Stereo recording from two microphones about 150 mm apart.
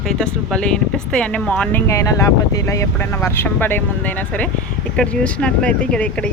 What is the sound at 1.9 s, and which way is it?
Speech, 20° left (ahead or behind).